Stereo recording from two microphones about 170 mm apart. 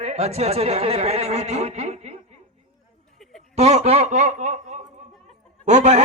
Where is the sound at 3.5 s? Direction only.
40° right (ahead or behind).